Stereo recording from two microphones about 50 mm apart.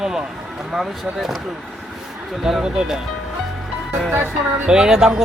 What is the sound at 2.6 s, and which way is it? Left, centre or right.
Speech, centre.